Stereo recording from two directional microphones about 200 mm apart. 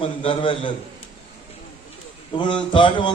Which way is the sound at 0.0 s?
25° left (ahead or behind).